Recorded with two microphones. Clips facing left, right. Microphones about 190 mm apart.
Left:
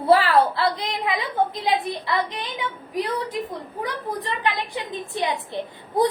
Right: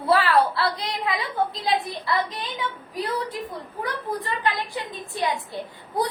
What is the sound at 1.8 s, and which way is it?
A woman's voice, 20° left (ahead or behind).